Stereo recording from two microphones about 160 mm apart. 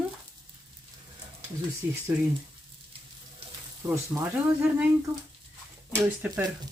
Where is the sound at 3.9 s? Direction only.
15° right (ahead or behind).